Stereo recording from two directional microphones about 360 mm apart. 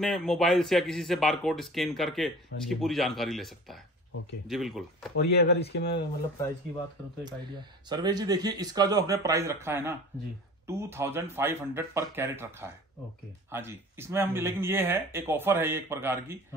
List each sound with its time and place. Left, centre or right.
0.0 s speech: centre
5.1 s speech: left
7.9 s speech: centre